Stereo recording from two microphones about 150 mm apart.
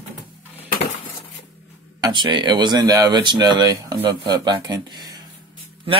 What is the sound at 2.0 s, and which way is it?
Speech, 30° right (ahead or behind).